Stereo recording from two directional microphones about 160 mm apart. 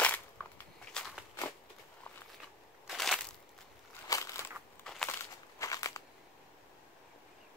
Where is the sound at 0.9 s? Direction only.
5° left (ahead or behind).